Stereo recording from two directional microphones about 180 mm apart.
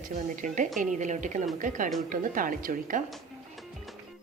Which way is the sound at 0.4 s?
45° right (ahead or behind).